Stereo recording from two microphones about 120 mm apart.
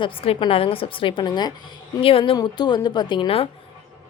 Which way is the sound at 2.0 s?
50° left (ahead or behind).